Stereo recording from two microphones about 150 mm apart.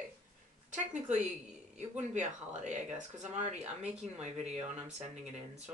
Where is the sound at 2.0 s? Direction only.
55° right (ahead or behind).